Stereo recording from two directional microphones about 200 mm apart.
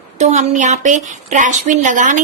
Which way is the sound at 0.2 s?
35° right (ahead or behind).